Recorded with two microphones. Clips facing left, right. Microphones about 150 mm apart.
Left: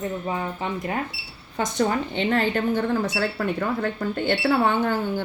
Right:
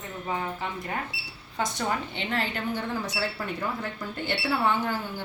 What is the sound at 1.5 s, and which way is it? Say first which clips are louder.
Speech: left 6 dB; 50° left (ahead or behind).